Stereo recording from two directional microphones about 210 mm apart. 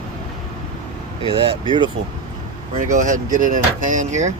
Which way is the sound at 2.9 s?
35° right (ahead or behind).